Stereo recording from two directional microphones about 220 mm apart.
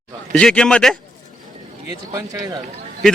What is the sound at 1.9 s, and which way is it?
Speech, 15° right (ahead or behind).